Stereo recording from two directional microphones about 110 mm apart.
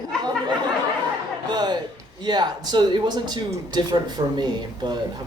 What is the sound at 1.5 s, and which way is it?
Speech, 40° right (ahead or behind).